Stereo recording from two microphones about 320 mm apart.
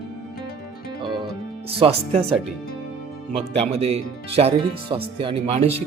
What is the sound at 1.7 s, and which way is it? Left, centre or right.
Speech, centre.